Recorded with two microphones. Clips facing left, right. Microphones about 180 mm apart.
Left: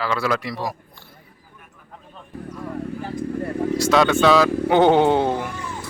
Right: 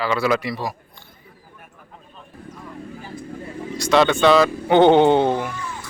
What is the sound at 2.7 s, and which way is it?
Vehicle, 65° left (ahead or behind).